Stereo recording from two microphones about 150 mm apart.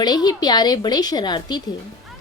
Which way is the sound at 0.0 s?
25° left (ahead or behind).